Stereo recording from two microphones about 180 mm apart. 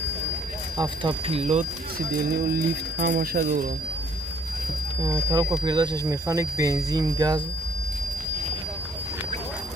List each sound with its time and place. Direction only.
0.7 s speech: 30° right (ahead or behind)
3.0 s speech: 55° right (ahead or behind)
5.0 s speech: 20° right (ahead or behind)